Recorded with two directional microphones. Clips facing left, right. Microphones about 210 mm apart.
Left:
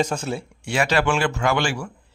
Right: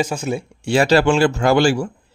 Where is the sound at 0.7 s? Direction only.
35° right (ahead or behind).